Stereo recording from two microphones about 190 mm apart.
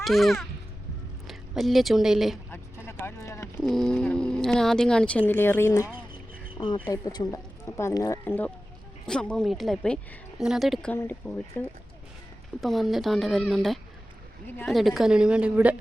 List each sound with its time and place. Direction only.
0.0 s a woman's voice: centre (ahead or behind)
2.5 s vehicle: 15° left (ahead or behind)
3.6 s speech: centre (ahead or behind)
6.6 s speech: 25° left (ahead or behind); by 15.7 s 5° right (ahead or behind)